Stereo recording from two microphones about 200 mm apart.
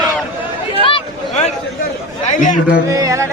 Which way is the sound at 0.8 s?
25° left (ahead or behind).